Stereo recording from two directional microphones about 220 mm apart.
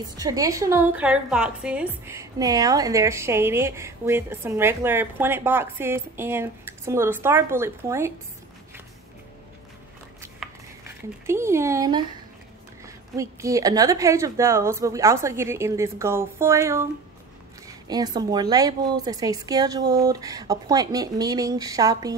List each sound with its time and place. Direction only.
0.2 s a woman's voice: 15° right (ahead or behind)
10.4 s cutlery: centre (ahead or behind)
11.2 s a woman's voice: 10° right (ahead or behind)
17.8 s a woman's voice: 15° right (ahead or behind)